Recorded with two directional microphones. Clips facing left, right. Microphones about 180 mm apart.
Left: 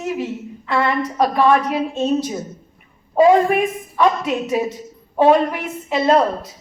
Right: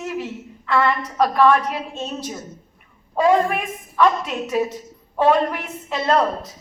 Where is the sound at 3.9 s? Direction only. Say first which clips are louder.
Even; 15° left (ahead or behind).